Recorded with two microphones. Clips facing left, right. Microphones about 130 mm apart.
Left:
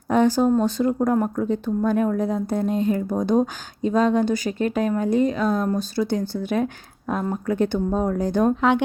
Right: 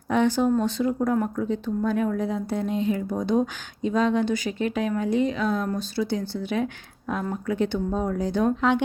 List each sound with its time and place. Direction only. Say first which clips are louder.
0.1 s speech: left 3 dB; 40° left (ahead or behind)